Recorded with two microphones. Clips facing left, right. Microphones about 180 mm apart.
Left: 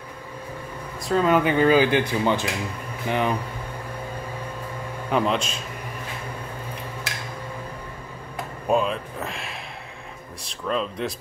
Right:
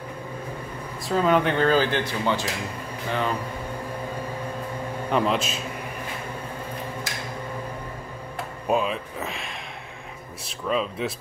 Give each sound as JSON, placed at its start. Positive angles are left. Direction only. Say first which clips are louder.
{"t": 1.0, "sound": "speech", "louder": "left 1 dB", "side_deg": 0}
{"t": 5.1, "sound": "speech", "louder": "left 1 dB", "side_deg": 0}
{"t": 8.6, "sound": "speech", "louder": "left 2 dB", "side_deg": 0}